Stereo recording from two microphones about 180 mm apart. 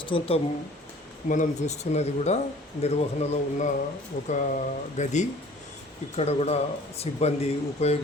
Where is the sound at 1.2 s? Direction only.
45° left (ahead or behind).